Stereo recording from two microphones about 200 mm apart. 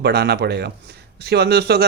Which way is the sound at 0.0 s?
55° right (ahead or behind).